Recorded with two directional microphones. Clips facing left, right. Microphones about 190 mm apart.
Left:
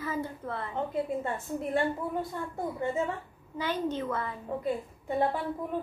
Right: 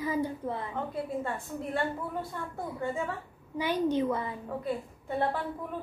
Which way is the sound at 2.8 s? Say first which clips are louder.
Left 2 dB; 20° left (ahead or behind).